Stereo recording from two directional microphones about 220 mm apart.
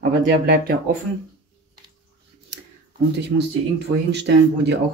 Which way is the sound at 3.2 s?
50° right (ahead or behind).